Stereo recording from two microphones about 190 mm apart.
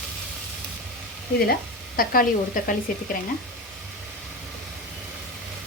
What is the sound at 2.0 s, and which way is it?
A woman's voice, 50° left (ahead or behind).